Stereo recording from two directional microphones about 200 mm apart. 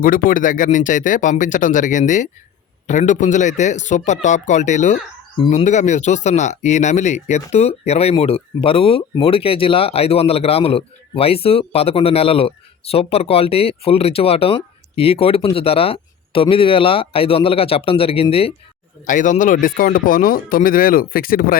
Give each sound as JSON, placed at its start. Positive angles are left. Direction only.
{"t": 0.0, "sound": "a man's voice", "side_deg": 45}
{"t": 19.0, "sound": "speech", "side_deg": 40}